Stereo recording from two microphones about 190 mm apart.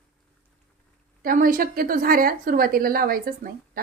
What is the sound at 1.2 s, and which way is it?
A woman's voice, 50° right (ahead or behind).